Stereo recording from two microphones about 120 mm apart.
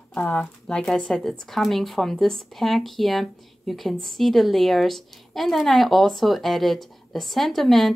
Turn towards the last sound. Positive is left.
turn(degrees=0)  # may be behind; listen again after turning